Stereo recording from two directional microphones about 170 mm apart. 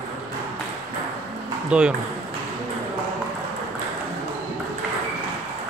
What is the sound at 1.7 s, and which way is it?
Speech, 5° right (ahead or behind).